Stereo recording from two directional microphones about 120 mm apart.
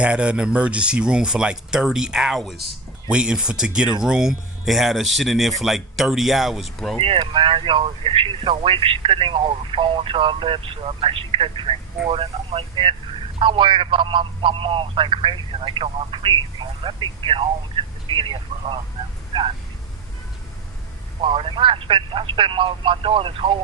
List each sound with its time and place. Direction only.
0.0 s speech: 10° right (ahead or behind)
7.0 s a man's voice: 50° right (ahead or behind)
21.2 s a man's voice: 50° right (ahead or behind)